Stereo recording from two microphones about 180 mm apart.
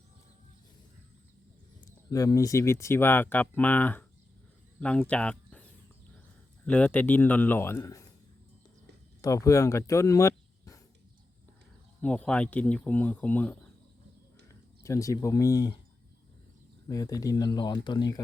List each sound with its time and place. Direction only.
1.8 s speech: 20° left (ahead or behind)
6.7 s speech: 10° left (ahead or behind)
9.2 s speech: 20° left (ahead or behind)
12.0 s speech: 5° left (ahead or behind)
16.9 s speech: 20° left (ahead or behind)